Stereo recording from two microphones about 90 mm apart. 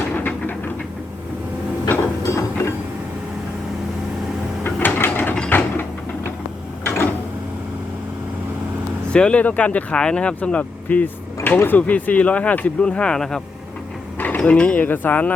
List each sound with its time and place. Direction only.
0.2 s a sound: 20° left (ahead or behind)
2.2 s mechanisms: 35° left (ahead or behind)
4.9 s ratchet: 20° left (ahead or behind)
5.5 s mechanisms: 25° left (ahead or behind)
6.8 s drawer open or close: 25° left (ahead or behind)
9.1 s speech: 10° left (ahead or behind)
14.2 s speech: 20° left (ahead or behind)